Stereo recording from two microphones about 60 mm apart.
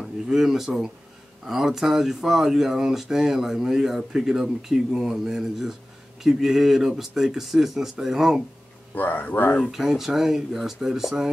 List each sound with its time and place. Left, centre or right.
0.0 s speech: centre
8.9 s speech: left
9.6 s speech: centre